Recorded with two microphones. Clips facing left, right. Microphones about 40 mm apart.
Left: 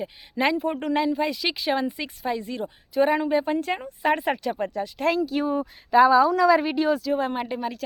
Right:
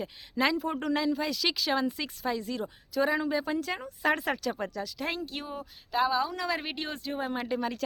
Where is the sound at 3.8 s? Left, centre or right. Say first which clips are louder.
Left 4 dB; left.